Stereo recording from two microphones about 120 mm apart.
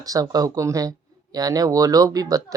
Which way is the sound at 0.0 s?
30° right (ahead or behind).